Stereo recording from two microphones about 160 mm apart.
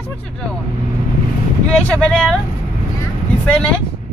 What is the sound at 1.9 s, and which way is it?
Speech, 5° left (ahead or behind).